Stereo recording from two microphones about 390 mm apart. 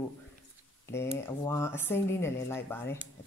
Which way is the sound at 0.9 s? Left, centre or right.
Centre.